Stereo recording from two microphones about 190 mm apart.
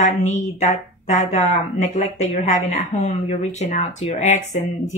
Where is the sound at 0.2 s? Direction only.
35° left (ahead or behind).